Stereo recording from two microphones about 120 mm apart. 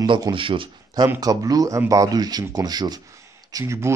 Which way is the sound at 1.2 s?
30° right (ahead or behind).